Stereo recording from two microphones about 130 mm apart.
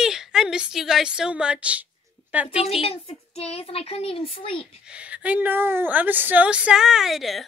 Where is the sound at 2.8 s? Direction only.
50° left (ahead or behind).